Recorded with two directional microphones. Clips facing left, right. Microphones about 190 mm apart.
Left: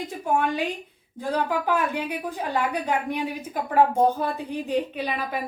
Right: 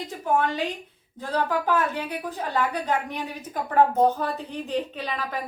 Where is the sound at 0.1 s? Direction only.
10° left (ahead or behind).